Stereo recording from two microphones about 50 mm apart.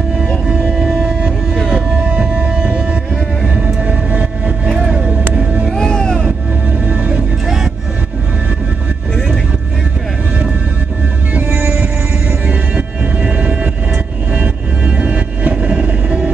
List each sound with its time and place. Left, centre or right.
0.5 s music: centre; by 4.7 s right
4.8 s vehicle: right
5.7 s music: centre
6.9 s music: right
7.4 s music: centre
11.3 s music: right
14.3 s vehicle: right